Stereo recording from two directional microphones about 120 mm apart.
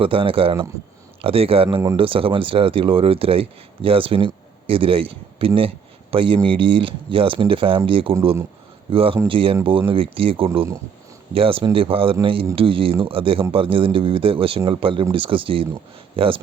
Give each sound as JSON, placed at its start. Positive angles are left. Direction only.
{"t": 0.0, "sound": "speech", "side_deg": -50}